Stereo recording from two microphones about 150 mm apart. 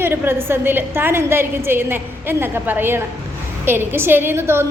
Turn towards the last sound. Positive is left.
turn(degrees=-15)  # may be behind; listen again after turning